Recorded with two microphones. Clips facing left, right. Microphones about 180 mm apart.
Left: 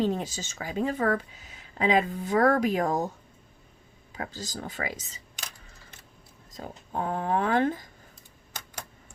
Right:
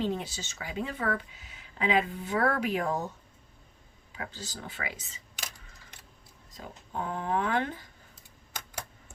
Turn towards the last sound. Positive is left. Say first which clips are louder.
# left 5 dB
turn(degrees=40)  # may be behind; listen again after turning